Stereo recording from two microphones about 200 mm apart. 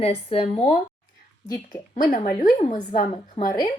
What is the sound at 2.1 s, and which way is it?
Speech, 40° left (ahead or behind).